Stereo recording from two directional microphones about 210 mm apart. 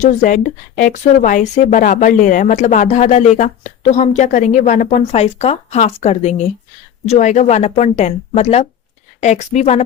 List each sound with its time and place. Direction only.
0.0 s speech: 35° left (ahead or behind)